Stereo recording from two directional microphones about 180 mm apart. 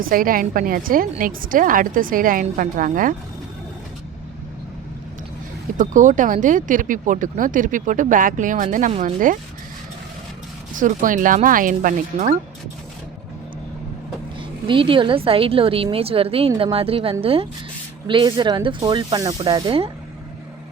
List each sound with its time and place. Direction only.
0.0 s speech: 50° right (ahead or behind)
5.7 s a woman's voice: 45° right (ahead or behind)
10.8 s speech: 45° right (ahead or behind)
14.7 s a woman's voice: 30° right (ahead or behind)